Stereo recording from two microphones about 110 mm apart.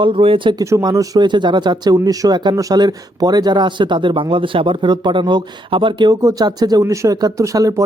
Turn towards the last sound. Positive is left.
turn(degrees=-30)  # may be behind; listen again after turning